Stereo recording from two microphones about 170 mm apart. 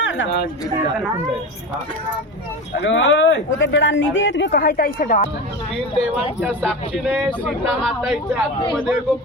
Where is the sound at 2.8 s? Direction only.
90° left; by 5.2 s 55° left (ahead or behind).